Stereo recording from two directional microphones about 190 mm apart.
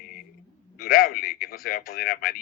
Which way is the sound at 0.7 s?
50° left (ahead or behind).